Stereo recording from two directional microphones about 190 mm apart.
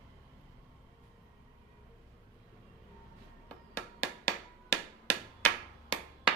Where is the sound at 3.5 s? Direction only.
15° left (ahead or behind).